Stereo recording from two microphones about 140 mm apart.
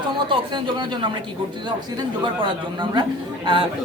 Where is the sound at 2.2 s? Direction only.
35° right (ahead or behind).